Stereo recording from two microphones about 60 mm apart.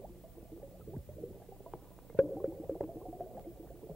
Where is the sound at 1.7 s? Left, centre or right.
Centre.